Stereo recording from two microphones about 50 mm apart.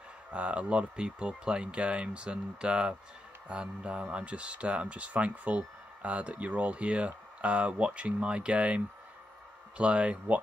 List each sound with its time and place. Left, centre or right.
0.3 s speech: right